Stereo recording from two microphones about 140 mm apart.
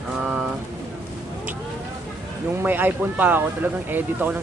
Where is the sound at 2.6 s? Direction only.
15° right (ahead or behind).